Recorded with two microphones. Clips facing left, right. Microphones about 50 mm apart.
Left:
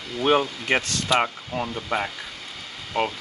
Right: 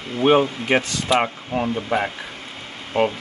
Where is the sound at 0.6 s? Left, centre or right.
Centre.